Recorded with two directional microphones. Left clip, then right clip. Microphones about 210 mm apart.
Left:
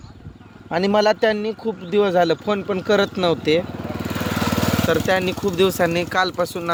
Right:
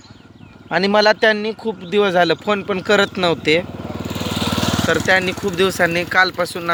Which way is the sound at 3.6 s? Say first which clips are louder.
Even; 35° right (ahead or behind).